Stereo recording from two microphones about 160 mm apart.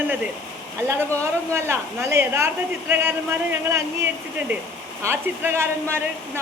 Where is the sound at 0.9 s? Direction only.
15° right (ahead or behind).